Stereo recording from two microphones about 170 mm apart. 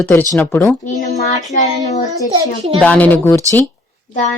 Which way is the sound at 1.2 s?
40° left (ahead or behind).